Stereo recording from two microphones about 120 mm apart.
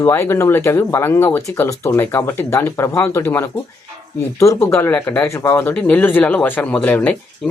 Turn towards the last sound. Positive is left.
turn(degrees=5)  # may be behind; listen again after turning